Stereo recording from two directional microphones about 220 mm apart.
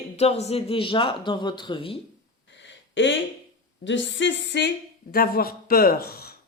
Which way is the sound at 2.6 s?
55° left (ahead or behind).